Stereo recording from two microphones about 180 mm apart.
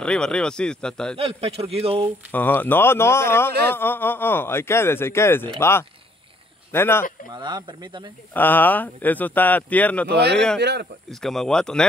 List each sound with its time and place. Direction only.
0.0 s speech: 5° left (ahead or behind)
1.1 s a man's voice: 35° right (ahead or behind)
2.3 s speech: 10° left (ahead or behind)
7.3 s speech: 25° right (ahead or behind)
8.3 s speech: 10° left (ahead or behind)
10.6 s speech: 70° right (ahead or behind)
11.1 s speech: centre (ahead or behind)